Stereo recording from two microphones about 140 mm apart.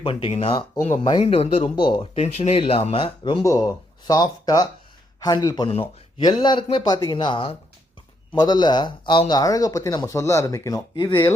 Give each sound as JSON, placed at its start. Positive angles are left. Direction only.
{"t": 0.0, "sound": "speech", "side_deg": 40}
{"t": 1.7, "sound": "speech", "side_deg": 35}
{"t": 2.2, "sound": "speech", "side_deg": 50}
{"t": 3.4, "sound": "speech", "side_deg": 25}